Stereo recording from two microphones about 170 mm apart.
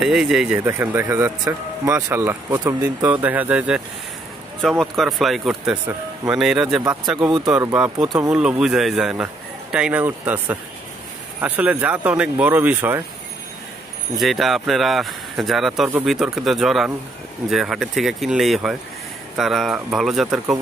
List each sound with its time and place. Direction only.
0.0 s a man's voice: 5° right (ahead or behind)
7.2 s speech: 25° right (ahead or behind)
7.6 s a man's voice: 10° right (ahead or behind)
14.1 s speech: centre (ahead or behind)